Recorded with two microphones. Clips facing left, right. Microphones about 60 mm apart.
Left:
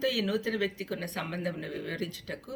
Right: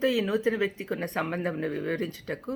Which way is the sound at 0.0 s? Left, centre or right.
Right.